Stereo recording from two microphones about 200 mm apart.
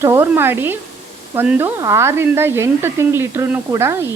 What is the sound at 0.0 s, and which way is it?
Speech, 15° right (ahead or behind).